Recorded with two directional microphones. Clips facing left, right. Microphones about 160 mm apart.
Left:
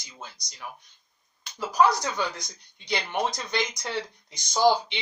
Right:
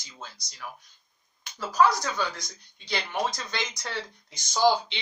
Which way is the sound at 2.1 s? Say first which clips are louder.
Left 1 dB; 20° left (ahead or behind).